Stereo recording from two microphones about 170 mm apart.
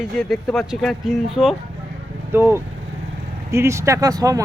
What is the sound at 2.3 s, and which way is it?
Speech, 15° right (ahead or behind).